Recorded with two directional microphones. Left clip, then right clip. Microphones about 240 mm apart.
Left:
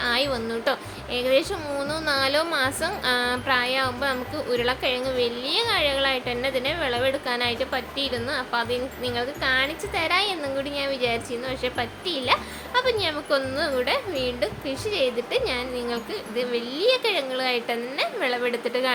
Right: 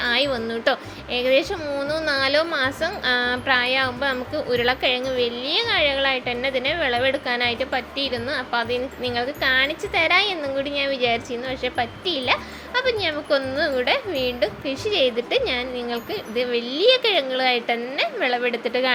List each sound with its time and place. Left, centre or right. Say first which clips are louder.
0.0 s a woman's voice: right 3 dB; centre